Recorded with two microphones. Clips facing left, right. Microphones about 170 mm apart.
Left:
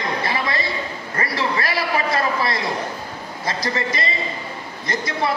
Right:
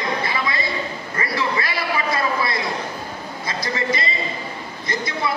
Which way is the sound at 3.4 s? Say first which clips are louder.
Left 1 dB; 35° left (ahead or behind).